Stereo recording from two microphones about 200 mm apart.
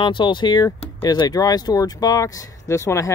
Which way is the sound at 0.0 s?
25° left (ahead or behind).